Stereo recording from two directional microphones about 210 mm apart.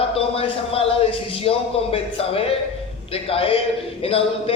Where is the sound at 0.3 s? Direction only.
25° left (ahead or behind).